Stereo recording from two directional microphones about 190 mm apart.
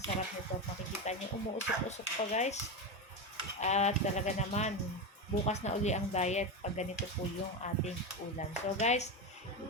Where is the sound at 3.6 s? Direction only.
35° left (ahead or behind).